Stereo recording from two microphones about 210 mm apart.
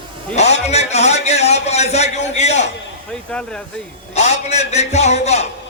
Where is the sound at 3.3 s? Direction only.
5° left (ahead or behind).